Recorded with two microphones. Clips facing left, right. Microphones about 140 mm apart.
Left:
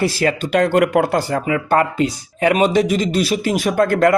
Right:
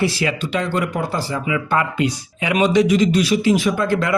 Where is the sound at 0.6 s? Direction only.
65° left (ahead or behind).